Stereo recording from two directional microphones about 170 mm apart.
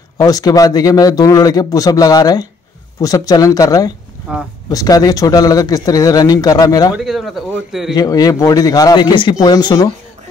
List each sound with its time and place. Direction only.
0.2 s a man's voice: 20° left (ahead or behind)
4.3 s speech: 5° right (ahead or behind)
4.6 s a man's voice: 20° left (ahead or behind)
7.0 s speech: centre (ahead or behind)
7.9 s a man's voice: 20° left (ahead or behind)